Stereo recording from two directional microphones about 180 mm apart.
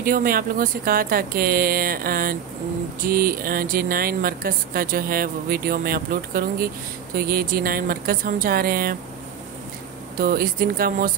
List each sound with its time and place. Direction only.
0.0 s speech: 50° right (ahead or behind)
10.1 s speech: 55° right (ahead or behind)